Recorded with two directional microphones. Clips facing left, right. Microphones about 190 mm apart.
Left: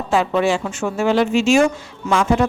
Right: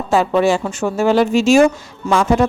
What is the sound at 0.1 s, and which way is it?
Speech, 40° right (ahead or behind).